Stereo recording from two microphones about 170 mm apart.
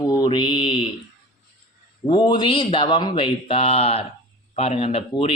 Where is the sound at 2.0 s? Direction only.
30° left (ahead or behind).